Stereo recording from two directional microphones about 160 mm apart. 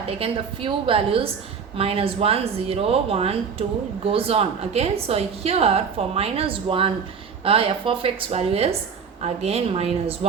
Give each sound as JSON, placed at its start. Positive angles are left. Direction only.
{"t": 0.2, "sound": "a woman's voice", "side_deg": -35}